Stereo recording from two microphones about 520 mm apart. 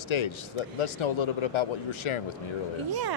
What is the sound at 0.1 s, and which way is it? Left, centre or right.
Speech, left.